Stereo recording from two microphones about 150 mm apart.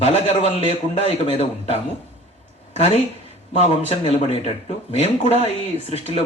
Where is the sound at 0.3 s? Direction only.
45° left (ahead or behind).